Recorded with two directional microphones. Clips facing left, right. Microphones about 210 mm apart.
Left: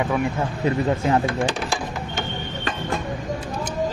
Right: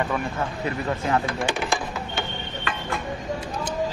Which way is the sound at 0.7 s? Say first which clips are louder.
Left 6 dB; 35° left (ahead or behind).